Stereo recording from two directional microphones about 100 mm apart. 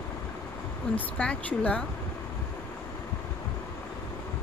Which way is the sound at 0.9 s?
15° left (ahead or behind).